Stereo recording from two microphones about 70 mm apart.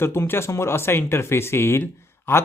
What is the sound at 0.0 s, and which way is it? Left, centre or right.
Speech, left.